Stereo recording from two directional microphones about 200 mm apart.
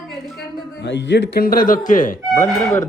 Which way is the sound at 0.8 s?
60° left (ahead or behind).